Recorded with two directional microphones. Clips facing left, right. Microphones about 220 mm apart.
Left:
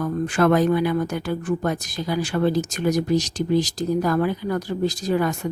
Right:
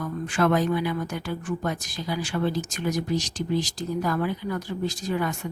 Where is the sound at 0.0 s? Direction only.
40° left (ahead or behind).